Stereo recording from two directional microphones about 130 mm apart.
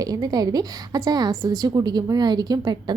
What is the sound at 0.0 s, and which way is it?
A woman's voice, 30° right (ahead or behind).